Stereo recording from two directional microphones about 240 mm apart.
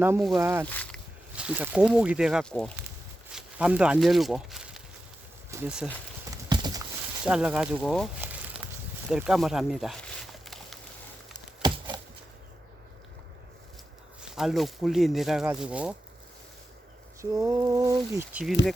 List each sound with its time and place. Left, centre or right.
0.0 s speech: centre
0.6 s speech: centre
1.4 s speech: centre
6.3 s clip-clop: centre
7.3 s speech: centre
9.0 s a sound: centre
14.2 s speech: centre
17.2 s speech: centre